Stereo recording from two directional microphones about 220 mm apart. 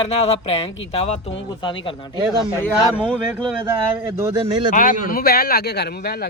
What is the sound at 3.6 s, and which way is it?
Speech, 10° right (ahead or behind).